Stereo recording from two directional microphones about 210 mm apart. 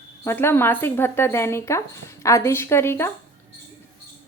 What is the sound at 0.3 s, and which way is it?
Speech, 10° left (ahead or behind).